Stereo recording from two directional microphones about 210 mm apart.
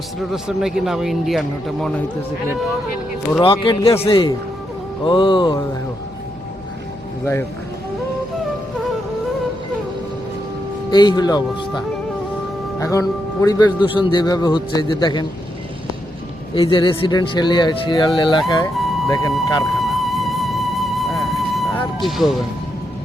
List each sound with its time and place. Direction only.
0.2 s speech: centre (ahead or behind)
3.4 s speech: 25° left (ahead or behind)
10.9 s speech: 20° left (ahead or behind)
12.8 s speech: 15° left (ahead or behind)
16.6 s speech: 25° left (ahead or behind)
18.8 s vehicle: centre (ahead or behind)
19.0 s speech: 15° left (ahead or behind)
19.3 s music: centre (ahead or behind)
22.0 s speech: centre (ahead or behind)